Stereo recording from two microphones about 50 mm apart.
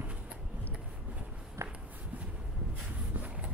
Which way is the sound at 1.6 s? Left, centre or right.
Right.